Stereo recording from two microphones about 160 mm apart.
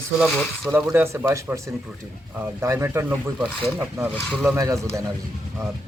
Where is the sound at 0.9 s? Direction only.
15° right (ahead or behind).